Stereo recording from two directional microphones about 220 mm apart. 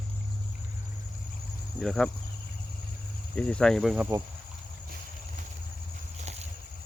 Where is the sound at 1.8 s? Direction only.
Centre (ahead or behind).